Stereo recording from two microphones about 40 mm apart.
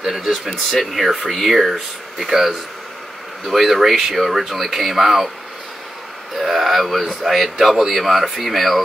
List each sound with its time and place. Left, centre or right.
0.2 s speech: centre
6.3 s speech: centre